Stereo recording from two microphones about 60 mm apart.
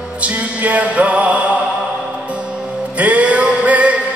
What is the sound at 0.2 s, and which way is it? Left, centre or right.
Music, right.